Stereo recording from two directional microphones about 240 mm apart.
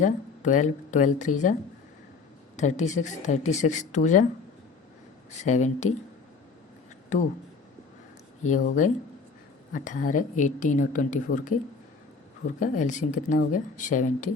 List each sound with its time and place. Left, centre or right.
0.0 s a woman's voice: left
2.6 s speech: left
5.3 s speech: left
8.4 s a woman's voice: left